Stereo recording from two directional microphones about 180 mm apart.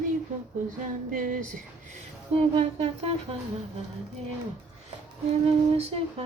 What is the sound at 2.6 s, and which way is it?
Humming, 35° right (ahead or behind).